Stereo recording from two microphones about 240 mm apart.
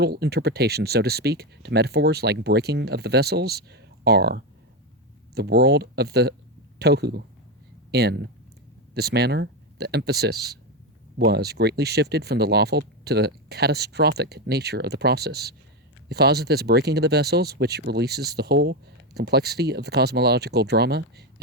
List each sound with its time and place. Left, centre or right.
0.0 s speech: right